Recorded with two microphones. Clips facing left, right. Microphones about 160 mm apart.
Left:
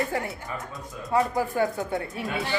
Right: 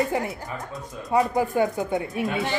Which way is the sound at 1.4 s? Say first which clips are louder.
Right 3 dB; 20° right (ahead or behind).